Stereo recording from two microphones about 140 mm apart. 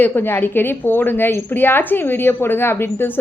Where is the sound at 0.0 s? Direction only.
15° left (ahead or behind).